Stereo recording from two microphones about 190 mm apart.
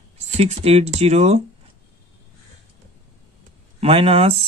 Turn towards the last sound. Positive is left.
turn(degrees=-30)  # may be behind; listen again after turning